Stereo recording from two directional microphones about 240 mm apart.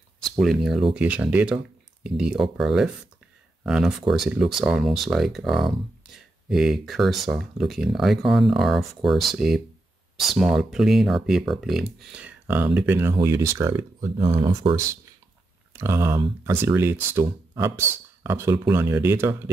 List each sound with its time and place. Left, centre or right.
0.2 s speech: centre
15.7 s speech: centre